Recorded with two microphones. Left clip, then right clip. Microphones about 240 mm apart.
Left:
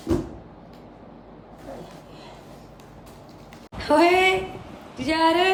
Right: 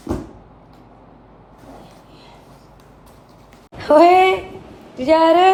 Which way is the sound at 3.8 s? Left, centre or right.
Centre.